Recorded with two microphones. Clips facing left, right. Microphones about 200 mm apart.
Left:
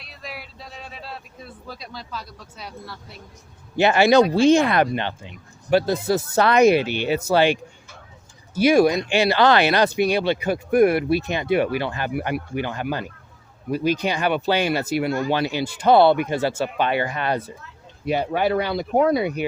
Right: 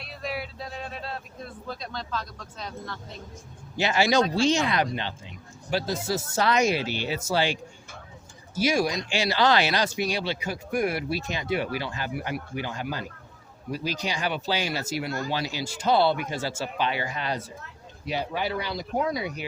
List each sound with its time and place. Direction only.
0.0 s speech: centre (ahead or behind)
3.8 s speech: 60° left (ahead or behind)